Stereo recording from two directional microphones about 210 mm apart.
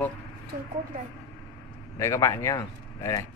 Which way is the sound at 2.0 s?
15° left (ahead or behind).